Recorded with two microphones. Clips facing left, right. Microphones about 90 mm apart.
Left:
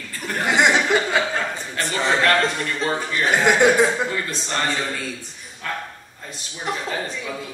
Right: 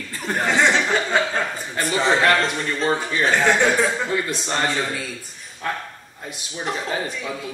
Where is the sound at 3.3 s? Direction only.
15° left (ahead or behind).